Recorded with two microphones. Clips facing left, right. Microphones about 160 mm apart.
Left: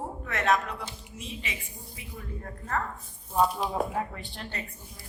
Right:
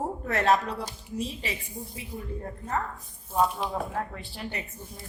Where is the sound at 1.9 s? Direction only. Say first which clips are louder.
Right 3 dB; 20° right (ahead or behind).